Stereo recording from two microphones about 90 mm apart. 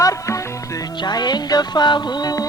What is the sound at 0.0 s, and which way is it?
Music, 35° left (ahead or behind).